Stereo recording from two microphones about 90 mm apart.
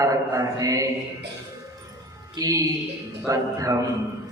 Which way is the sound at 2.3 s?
40° right (ahead or behind).